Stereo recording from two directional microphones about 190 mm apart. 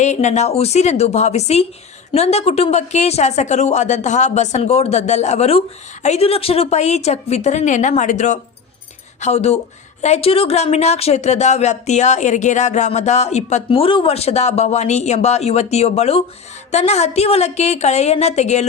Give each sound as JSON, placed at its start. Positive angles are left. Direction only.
{"t": 0.0, "sound": "a woman's voice", "side_deg": 40}